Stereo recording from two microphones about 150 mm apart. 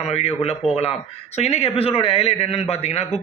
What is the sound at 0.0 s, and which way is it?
A man's voice, 45° left (ahead or behind).